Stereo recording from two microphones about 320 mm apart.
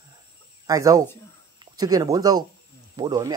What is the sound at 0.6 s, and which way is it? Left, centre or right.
Speech, centre.